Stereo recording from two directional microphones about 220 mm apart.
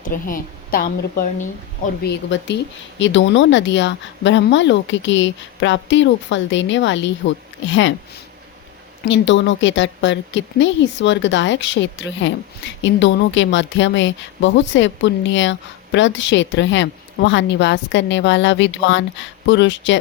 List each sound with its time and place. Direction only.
0.0 s a woman's voice: 40° left (ahead or behind)
2.0 s a woman's voice: 50° left (ahead or behind)
9.0 s a woman's voice: 55° left (ahead or behind)